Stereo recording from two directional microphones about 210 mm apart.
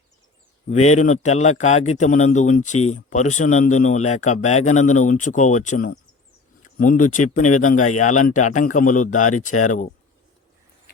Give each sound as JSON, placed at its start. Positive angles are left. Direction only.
{"t": 0.9, "sound": "speech", "side_deg": 35}
{"t": 7.4, "sound": "speech", "side_deg": 90}
{"t": 8.1, "sound": "speech", "side_deg": 35}